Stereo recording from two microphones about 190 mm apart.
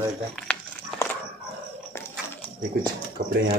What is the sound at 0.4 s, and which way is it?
Crumpling, 5° left (ahead or behind).